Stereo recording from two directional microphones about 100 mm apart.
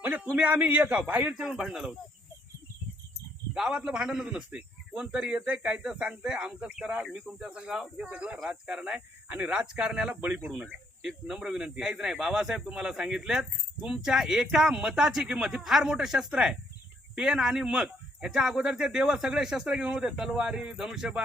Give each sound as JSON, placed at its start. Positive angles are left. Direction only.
{"t": 0.0, "sound": "a man's voice", "side_deg": -15}
{"t": 1.5, "sound": "speech", "side_deg": 0}
{"t": 3.5, "sound": "a man's voice", "side_deg": -5}